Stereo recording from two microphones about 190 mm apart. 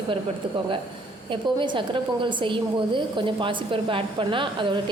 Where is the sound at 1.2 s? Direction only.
25° right (ahead or behind).